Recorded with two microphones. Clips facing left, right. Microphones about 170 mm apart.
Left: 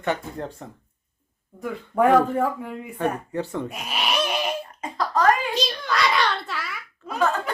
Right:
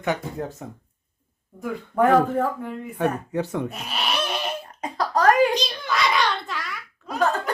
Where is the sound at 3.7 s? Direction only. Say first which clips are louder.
Left 1 dB; 10° left (ahead or behind).